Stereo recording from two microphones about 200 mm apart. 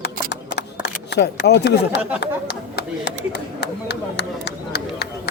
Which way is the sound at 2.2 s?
55° left (ahead or behind).